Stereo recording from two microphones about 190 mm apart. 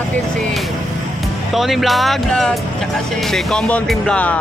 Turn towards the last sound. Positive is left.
turn(degrees=5)  # may be behind; listen again after turning